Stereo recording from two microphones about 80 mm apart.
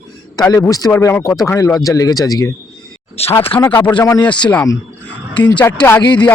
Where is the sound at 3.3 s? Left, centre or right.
Left.